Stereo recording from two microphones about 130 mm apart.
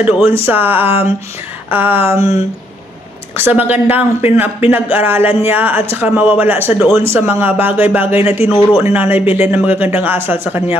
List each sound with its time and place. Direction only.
0.0 s speech: 15° right (ahead or behind)
0.8 s a sound: 50° left (ahead or behind)
1.7 s speech: 15° right (ahead or behind)
3.3 s speech: 15° right (ahead or behind)
8.4 s speech: 40° left (ahead or behind)
8.7 s speech: 15° right (ahead or behind)